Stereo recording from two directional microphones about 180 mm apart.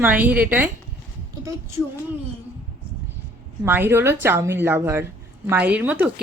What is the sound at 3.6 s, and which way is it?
Speech, 10° right (ahead or behind).